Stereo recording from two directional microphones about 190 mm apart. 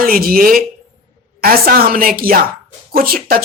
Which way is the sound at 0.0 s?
50° right (ahead or behind).